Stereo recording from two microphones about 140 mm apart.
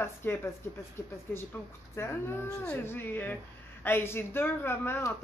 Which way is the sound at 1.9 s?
15° left (ahead or behind).